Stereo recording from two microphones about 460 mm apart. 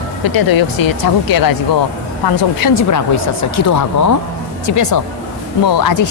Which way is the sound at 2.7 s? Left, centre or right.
Left.